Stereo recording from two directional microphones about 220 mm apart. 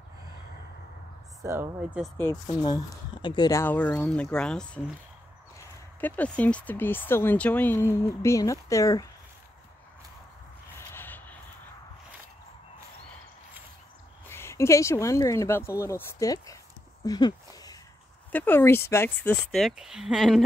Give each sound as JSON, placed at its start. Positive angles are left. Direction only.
{"t": 1.4, "sound": "speech", "side_deg": -10}
{"t": 2.1, "sound": "speech", "side_deg": 15}
{"t": 10.9, "sound": "a sound", "side_deg": 10}
{"t": 14.3, "sound": "speech", "side_deg": 10}